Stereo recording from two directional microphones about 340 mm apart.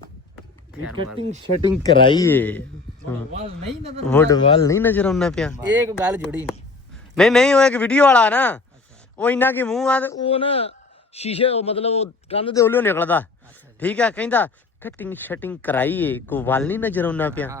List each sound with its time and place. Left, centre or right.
0.9 s speech: centre
1.8 s a man's voice: centre
4.0 s a man's voice: centre